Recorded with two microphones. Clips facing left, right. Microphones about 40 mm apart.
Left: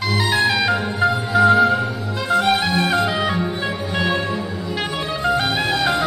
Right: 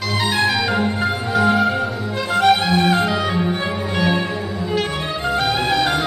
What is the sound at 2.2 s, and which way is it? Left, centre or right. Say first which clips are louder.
Music: right 2 dB; right.